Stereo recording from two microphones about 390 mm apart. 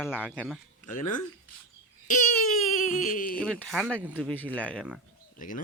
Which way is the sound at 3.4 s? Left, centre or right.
Centre.